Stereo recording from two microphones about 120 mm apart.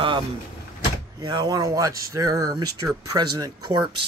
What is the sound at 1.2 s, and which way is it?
Speech, 35° right (ahead or behind).